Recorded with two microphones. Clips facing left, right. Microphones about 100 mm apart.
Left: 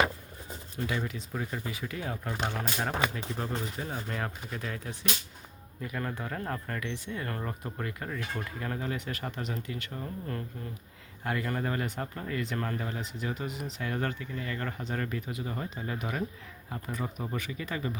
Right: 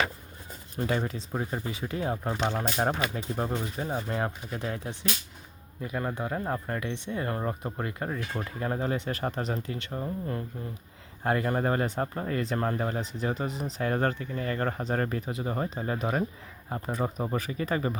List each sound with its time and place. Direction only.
0.9 s speech: 40° right (ahead or behind)
11.2 s speech: 35° right (ahead or behind)